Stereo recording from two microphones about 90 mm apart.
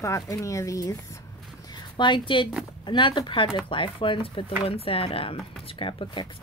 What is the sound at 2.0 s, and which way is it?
Speech, 60° left (ahead or behind).